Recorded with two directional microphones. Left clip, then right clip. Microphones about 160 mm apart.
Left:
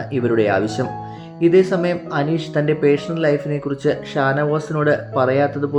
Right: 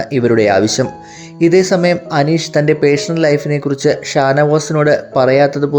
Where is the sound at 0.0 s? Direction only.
35° right (ahead or behind).